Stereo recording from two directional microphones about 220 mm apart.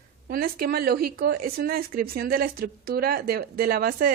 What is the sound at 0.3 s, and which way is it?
Speech, 45° right (ahead or behind).